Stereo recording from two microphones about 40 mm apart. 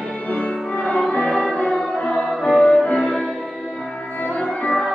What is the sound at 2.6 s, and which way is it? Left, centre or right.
Music, centre.